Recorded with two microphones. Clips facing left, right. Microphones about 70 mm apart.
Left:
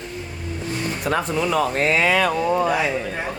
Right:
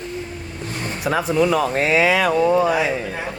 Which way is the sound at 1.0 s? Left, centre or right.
Centre.